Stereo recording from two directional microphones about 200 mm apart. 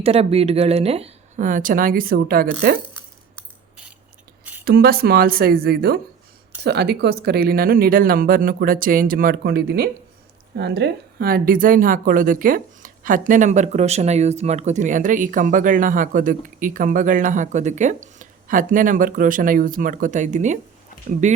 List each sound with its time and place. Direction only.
0.0 s a woman's voice: 30° right (ahead or behind); by 2.7 s 55° right (ahead or behind)
4.6 s a woman's voice: 50° right (ahead or behind)